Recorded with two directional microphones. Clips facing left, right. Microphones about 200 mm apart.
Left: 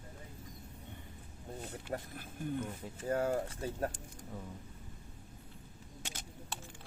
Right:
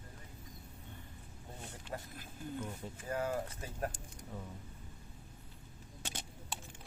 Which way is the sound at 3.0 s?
30° left (ahead or behind).